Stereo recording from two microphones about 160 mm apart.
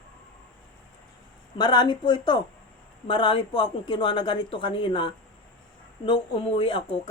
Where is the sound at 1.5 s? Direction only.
30° left (ahead or behind).